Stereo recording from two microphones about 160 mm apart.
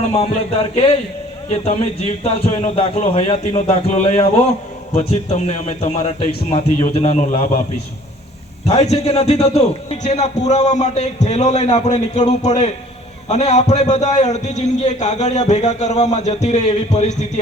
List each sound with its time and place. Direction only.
1.5 s a man's voice: 45° left (ahead or behind)
8.6 s a man's voice: 45° left (ahead or behind)